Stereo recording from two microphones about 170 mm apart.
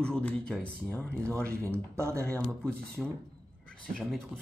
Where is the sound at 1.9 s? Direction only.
15° right (ahead or behind).